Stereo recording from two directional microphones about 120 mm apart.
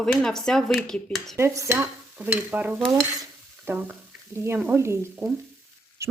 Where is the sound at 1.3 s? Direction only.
20° right (ahead or behind).